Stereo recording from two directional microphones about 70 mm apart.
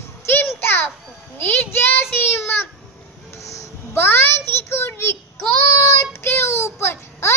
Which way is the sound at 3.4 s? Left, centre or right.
Left.